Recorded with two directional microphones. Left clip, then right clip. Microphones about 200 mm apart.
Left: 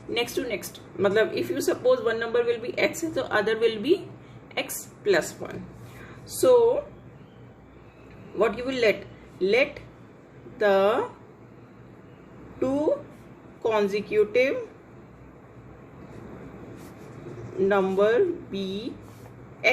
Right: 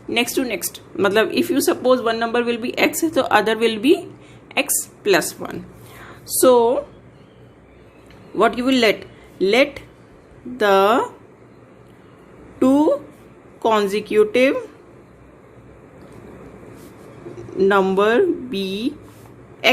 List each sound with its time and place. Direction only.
0.1 s speech: 50° right (ahead or behind)
5.0 s speech: 50° right (ahead or behind)
8.4 s speech: 55° right (ahead or behind)
12.5 s a woman's voice: 55° right (ahead or behind)
17.7 s speech: 55° right (ahead or behind)